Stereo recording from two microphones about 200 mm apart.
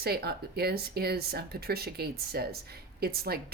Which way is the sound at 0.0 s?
50° right (ahead or behind).